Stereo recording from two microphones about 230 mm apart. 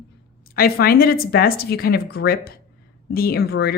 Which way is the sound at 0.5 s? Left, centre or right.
Left.